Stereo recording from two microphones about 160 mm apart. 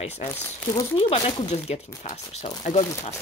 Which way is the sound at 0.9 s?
35° left (ahead or behind).